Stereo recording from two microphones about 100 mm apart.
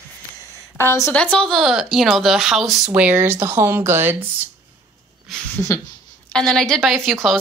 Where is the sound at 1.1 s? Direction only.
10° left (ahead or behind).